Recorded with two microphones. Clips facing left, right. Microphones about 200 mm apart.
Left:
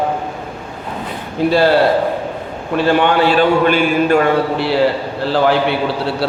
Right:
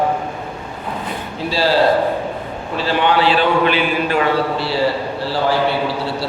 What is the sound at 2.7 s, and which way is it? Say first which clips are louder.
A man's voice: left 4 dB; 50° left (ahead or behind).